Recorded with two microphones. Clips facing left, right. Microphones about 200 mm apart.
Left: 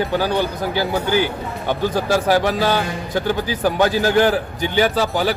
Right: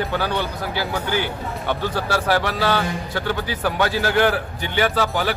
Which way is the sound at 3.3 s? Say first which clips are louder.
Left 3 dB; 40° left (ahead or behind).